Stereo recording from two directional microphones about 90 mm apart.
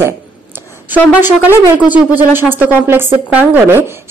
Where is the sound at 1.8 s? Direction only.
10° right (ahead or behind).